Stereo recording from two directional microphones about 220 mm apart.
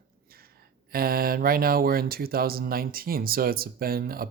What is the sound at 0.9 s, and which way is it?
Speech, 45° right (ahead or behind).